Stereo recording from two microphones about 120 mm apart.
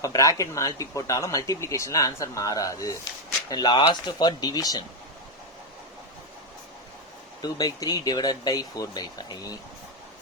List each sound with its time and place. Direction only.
0.0 s speech: 25° left (ahead or behind)
3.5 s speech: 40° left (ahead or behind)
7.4 s speech: 30° left (ahead or behind)